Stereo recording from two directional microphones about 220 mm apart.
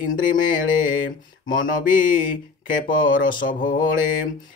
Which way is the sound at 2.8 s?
40° left (ahead or behind).